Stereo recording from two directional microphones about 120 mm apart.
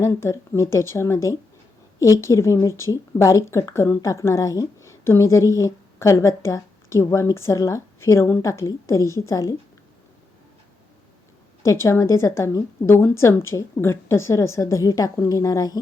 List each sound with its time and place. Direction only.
0.0 s a woman's voice: 25° left (ahead or behind)
11.6 s a woman's voice: 25° left (ahead or behind)